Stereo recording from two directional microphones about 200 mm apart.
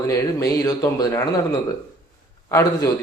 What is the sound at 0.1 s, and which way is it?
A man's voice, 15° left (ahead or behind).